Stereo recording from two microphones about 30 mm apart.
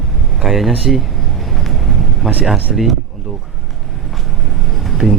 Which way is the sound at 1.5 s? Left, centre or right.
Centre.